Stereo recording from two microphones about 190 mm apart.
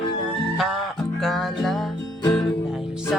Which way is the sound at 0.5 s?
Centre (ahead or behind).